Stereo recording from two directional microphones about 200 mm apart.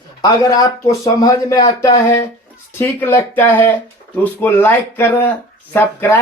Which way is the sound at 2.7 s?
10° left (ahead or behind).